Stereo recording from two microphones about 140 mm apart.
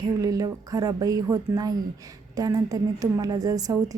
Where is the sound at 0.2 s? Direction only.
25° right (ahead or behind).